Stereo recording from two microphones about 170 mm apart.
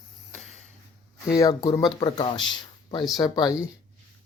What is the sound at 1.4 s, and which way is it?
Speech, 20° left (ahead or behind).